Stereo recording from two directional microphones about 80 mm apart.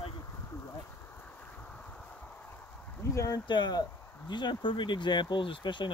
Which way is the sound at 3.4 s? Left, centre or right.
Left.